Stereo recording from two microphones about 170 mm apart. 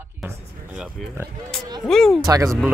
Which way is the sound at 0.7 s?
Centre (ahead or behind).